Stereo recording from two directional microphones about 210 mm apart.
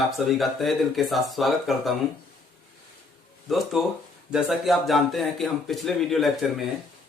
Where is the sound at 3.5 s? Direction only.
Centre (ahead or behind).